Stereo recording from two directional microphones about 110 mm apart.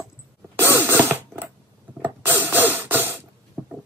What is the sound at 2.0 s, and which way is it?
Ratchet, 20° right (ahead or behind).